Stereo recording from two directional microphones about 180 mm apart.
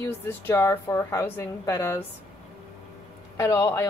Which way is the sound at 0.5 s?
15° left (ahead or behind).